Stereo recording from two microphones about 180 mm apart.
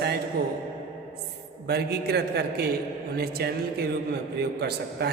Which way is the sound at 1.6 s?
65° right (ahead or behind).